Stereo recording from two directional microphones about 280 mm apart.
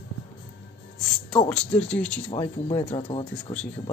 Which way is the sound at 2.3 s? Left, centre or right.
Centre.